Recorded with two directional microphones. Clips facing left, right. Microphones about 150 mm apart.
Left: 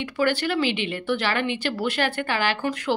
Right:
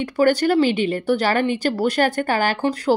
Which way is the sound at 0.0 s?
40° right (ahead or behind).